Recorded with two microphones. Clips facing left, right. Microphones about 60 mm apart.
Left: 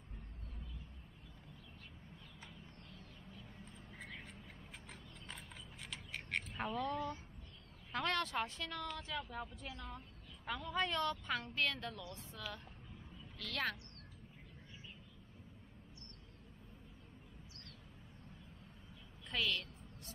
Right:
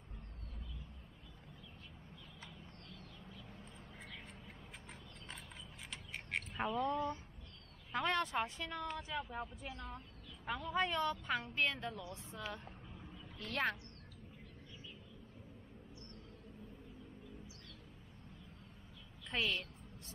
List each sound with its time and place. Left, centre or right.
5.9 s vehicle: centre
6.7 s speech: right
7.9 s a woman's voice: centre
19.3 s a woman's voice: right